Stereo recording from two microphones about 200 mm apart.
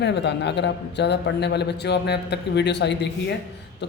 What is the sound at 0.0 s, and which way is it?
A man's voice, 60° left (ahead or behind).